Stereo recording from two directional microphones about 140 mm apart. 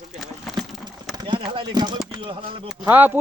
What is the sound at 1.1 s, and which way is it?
Speech, 35° right (ahead or behind).